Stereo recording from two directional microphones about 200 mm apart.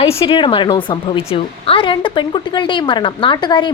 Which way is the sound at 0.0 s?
30° left (ahead or behind).